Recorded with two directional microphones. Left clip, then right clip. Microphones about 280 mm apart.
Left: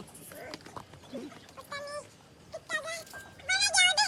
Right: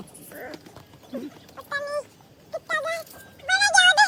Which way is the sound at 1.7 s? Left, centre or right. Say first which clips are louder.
Right 11 dB; centre.